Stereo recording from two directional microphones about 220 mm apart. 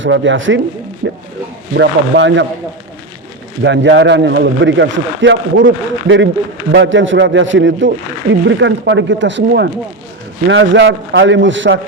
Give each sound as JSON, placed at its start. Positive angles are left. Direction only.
{"t": 0.0, "sound": "a man's voice", "side_deg": -60}
{"t": 3.6, "sound": "a man's voice", "side_deg": -55}